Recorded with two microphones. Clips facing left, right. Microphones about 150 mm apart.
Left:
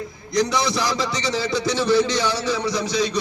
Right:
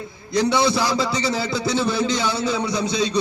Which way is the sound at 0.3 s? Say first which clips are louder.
Right 2 dB; 30° right (ahead or behind).